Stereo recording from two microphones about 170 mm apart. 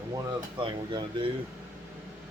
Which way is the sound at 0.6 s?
30° right (ahead or behind).